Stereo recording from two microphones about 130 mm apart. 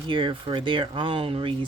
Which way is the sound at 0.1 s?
40° right (ahead or behind).